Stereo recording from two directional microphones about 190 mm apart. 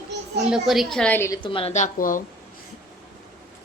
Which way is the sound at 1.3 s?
25° left (ahead or behind).